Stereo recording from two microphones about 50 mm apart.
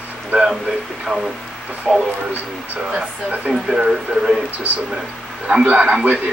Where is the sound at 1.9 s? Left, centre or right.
Centre.